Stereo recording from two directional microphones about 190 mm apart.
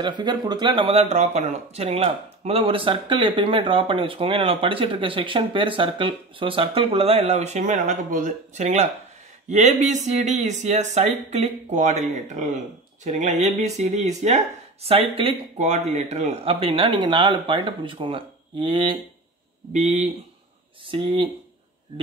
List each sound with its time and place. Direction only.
0.0 s speech: 25° right (ahead or behind)
19.7 s speech: 35° right (ahead or behind)
20.8 s speech: 25° right (ahead or behind)